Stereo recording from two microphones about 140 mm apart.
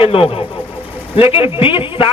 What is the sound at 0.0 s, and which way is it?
A man's voice, 40° left (ahead or behind).